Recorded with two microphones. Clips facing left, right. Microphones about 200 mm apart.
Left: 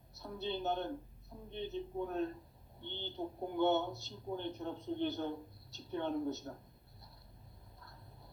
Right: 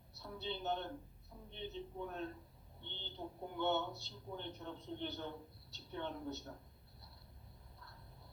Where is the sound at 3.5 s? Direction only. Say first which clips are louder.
Left 6 dB; 45° left (ahead or behind).